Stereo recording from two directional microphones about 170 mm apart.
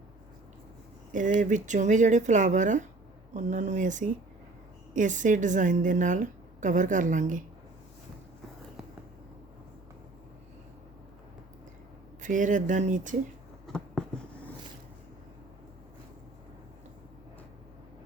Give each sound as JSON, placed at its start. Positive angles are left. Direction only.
{"t": 1.1, "sound": "a woman's voice", "side_deg": -50}
{"t": 12.2, "sound": "a woman's voice", "side_deg": -50}